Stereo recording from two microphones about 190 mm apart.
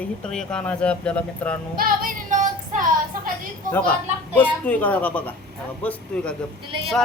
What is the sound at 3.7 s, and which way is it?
Speech, 10° left (ahead or behind).